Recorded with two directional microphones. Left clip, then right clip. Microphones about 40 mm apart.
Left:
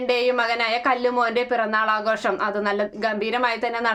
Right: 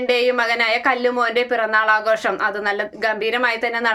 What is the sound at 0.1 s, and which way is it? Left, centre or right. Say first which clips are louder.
A woman's voice: right 3 dB; left.